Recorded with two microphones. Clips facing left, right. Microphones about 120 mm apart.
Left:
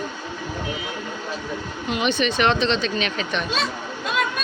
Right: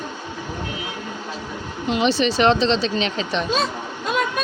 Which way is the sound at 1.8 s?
30° right (ahead or behind).